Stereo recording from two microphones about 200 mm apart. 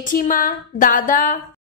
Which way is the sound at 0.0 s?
40° left (ahead or behind).